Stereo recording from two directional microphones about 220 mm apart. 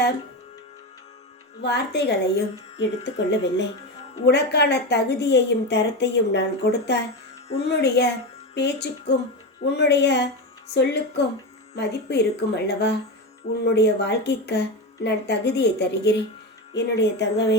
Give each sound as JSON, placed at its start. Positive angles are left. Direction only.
{"t": 1.6, "sound": "a woman's voice", "side_deg": 50}
{"t": 7.4, "sound": "music", "side_deg": 30}
{"t": 7.7, "sound": "a woman's voice", "side_deg": 50}
{"t": 11.7, "sound": "a woman's voice", "side_deg": 50}